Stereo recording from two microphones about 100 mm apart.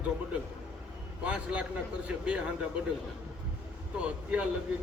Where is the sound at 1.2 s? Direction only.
10° right (ahead or behind).